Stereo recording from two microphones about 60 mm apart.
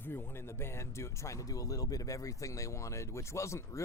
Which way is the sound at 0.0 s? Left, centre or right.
Left.